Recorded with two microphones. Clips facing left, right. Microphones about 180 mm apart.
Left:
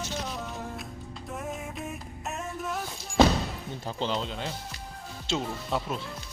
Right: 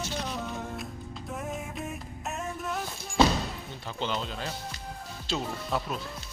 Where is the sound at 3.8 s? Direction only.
35° left (ahead or behind).